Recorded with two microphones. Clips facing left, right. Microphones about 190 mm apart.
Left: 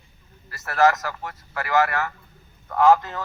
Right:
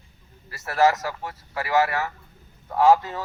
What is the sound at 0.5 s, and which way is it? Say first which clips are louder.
A man's voice: left 1 dB; 30° right (ahead or behind).